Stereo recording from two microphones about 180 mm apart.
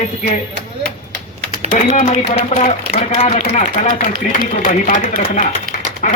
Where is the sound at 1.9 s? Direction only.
40° left (ahead or behind).